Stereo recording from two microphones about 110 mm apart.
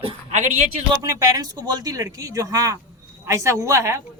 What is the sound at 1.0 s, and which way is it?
A woman's voice, 30° right (ahead or behind).